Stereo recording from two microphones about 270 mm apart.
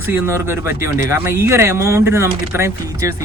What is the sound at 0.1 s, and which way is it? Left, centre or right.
Speech, centre.